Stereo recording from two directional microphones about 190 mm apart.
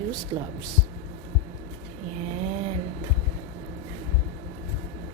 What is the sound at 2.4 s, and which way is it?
Vehicle, 35° right (ahead or behind).